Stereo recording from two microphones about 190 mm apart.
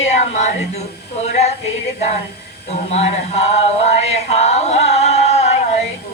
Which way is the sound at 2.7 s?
35° left (ahead or behind).